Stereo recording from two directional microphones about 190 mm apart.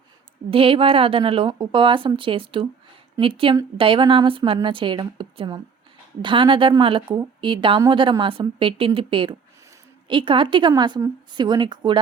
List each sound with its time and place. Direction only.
0.5 s a woman's voice: 30° right (ahead or behind)